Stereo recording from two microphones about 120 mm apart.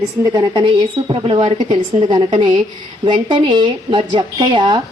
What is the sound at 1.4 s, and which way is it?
Speech, 65° right (ahead or behind).